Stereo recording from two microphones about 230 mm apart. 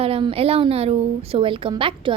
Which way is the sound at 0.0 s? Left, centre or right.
Right.